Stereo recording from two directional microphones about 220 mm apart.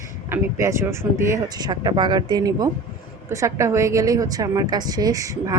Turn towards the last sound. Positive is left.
turn(degrees=-15)  # may be behind; listen again after turning